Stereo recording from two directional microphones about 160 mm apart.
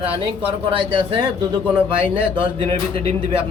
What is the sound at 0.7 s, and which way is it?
Speech, 35° right (ahead or behind).